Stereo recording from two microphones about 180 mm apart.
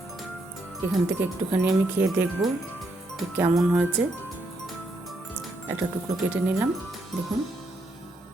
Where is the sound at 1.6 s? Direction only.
5° right (ahead or behind).